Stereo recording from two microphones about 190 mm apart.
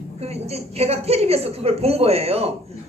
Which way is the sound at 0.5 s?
35° right (ahead or behind).